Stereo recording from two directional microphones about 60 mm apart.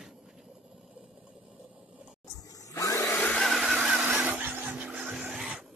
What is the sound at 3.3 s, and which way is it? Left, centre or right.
Vehicle, centre.